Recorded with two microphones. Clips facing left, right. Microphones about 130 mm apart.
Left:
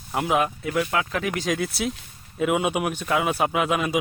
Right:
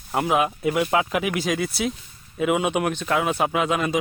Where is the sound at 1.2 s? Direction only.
5° right (ahead or behind).